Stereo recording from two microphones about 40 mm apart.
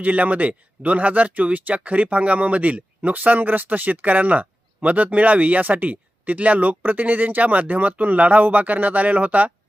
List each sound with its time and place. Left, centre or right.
0.0 s speech: right